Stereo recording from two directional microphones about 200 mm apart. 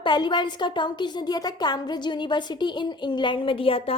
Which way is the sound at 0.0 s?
25° left (ahead or behind).